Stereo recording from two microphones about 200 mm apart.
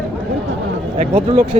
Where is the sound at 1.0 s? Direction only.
25° right (ahead or behind).